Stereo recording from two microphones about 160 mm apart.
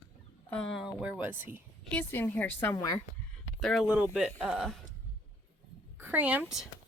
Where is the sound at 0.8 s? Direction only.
5° right (ahead or behind).